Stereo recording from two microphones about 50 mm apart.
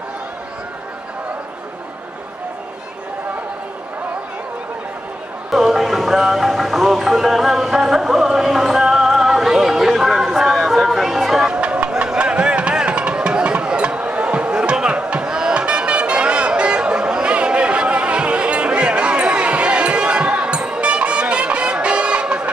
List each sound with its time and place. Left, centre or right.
5.5 s music: centre
11.4 s a sound: right
11.9 s music: centre